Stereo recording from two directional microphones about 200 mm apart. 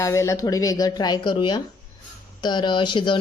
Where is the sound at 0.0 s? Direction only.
15° left (ahead or behind).